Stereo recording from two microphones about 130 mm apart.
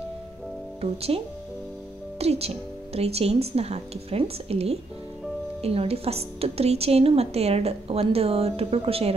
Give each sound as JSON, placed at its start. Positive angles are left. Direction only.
{"t": 0.7, "sound": "a woman's voice", "side_deg": -50}